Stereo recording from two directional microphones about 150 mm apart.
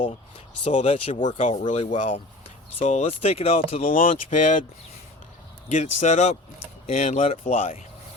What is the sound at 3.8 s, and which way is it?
Speech, 65° left (ahead or behind).